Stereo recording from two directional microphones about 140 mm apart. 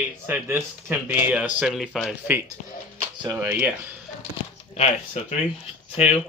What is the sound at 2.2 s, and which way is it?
A man's voice, 15° right (ahead or behind).